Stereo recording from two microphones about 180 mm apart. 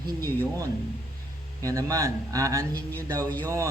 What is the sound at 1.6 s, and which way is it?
Speech, 20° right (ahead or behind).